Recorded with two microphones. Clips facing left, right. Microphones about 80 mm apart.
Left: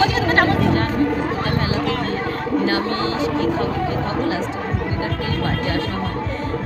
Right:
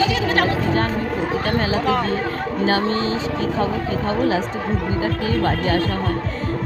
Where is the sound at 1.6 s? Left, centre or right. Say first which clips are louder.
Right 2 dB; right.